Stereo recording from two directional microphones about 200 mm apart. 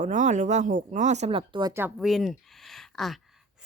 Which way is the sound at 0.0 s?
40° right (ahead or behind).